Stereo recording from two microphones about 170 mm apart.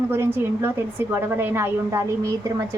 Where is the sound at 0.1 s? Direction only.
15° right (ahead or behind).